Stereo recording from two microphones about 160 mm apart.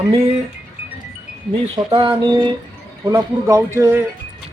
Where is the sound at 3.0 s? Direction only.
20° right (ahead or behind).